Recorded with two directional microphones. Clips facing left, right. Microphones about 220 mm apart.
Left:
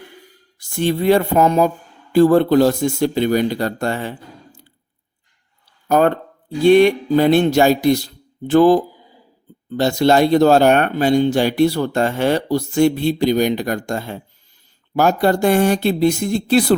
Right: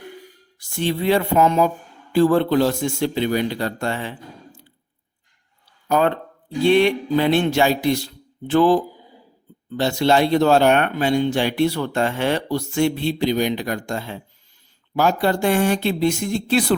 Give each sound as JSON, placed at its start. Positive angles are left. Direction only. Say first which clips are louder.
{"t": 0.6, "sound": "speech", "louder": "left 4 dB", "side_deg": 45}
{"t": 5.9, "sound": "speech", "louder": "left 4 dB", "side_deg": 45}